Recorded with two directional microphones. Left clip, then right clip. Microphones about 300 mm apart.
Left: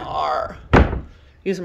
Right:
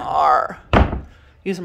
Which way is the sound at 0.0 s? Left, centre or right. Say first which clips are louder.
Right 6 dB; centre.